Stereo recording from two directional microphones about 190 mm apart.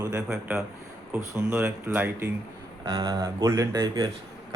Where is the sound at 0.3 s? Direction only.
5° right (ahead or behind).